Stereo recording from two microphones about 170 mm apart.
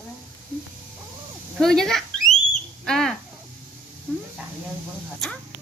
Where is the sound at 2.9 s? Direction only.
5° left (ahead or behind).